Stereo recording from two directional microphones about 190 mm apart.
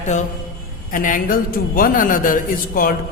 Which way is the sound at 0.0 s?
40° left (ahead or behind).